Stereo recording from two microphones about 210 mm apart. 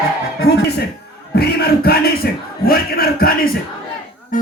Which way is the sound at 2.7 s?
45° left (ahead or behind).